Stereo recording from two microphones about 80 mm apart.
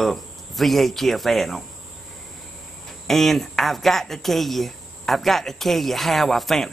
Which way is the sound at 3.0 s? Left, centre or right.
Centre.